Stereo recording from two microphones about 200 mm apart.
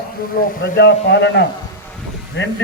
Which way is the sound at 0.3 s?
45° left (ahead or behind).